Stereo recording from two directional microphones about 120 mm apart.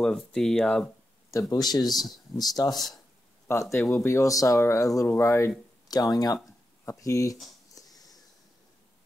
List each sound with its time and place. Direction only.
0.0 s speech: 5° left (ahead or behind)
1.5 s speech: 35° left (ahead or behind)
3.5 s speech: 20° left (ahead or behind)
7.7 s a sound: 30° left (ahead or behind)